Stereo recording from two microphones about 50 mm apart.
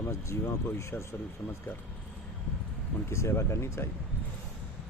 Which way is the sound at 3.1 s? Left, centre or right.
Left.